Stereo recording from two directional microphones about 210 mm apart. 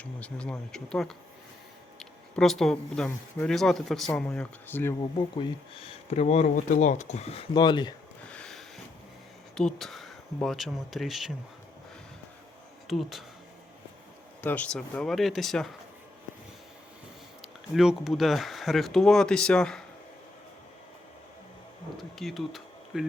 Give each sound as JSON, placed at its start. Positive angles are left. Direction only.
{"t": 0.0, "sound": "speech", "side_deg": 5}
{"t": 5.1, "sound": "speech", "side_deg": 25}
{"t": 8.3, "sound": "a sound", "side_deg": 5}
{"t": 9.6, "sound": "speech", "side_deg": 0}
{"t": 12.9, "sound": "speech", "side_deg": 0}
{"t": 14.4, "sound": "speech", "side_deg": 5}
{"t": 17.4, "sound": "speech", "side_deg": 0}
{"t": 21.9, "sound": "speech", "side_deg": 0}